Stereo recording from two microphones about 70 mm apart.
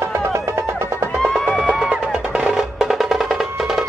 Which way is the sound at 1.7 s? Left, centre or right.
Centre.